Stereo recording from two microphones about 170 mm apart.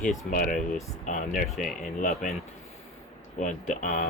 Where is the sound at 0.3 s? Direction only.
50° left (ahead or behind).